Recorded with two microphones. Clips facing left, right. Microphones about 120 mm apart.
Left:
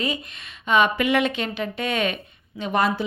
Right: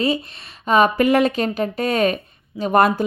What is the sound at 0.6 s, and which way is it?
A woman's voice, 40° right (ahead or behind).